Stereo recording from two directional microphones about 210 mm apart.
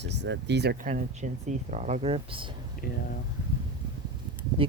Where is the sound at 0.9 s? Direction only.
35° right (ahead or behind).